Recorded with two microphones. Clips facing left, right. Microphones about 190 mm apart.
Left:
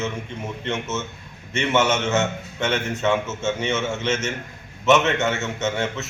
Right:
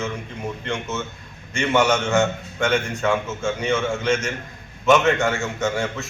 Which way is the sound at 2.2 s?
25° left (ahead or behind).